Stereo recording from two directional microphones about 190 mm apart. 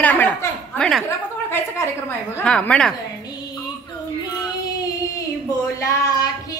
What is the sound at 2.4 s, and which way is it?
Speech, 5° left (ahead or behind).